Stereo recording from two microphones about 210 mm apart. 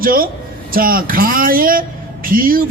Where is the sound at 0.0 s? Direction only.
45° right (ahead or behind).